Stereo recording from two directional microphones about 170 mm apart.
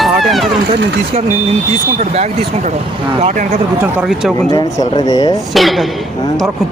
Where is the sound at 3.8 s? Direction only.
5° right (ahead or behind).